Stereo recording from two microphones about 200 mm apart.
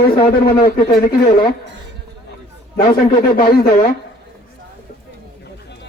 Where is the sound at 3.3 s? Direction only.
45° left (ahead or behind).